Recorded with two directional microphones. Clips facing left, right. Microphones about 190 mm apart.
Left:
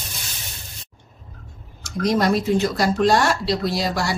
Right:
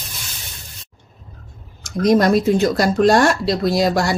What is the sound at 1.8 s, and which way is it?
Speech, 45° right (ahead or behind).